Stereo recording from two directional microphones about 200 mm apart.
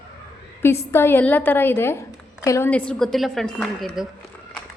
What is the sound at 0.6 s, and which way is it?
A woman's voice, 10° left (ahead or behind).